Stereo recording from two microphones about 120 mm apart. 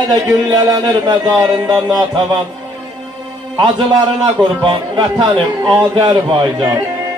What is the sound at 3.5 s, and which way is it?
Speech, 40° right (ahead or behind).